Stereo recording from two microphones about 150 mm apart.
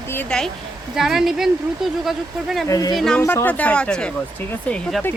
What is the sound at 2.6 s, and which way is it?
Speech, 25° left (ahead or behind).